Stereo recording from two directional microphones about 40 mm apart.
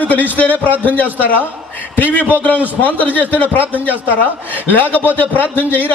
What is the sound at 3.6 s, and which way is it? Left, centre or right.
Speech, right.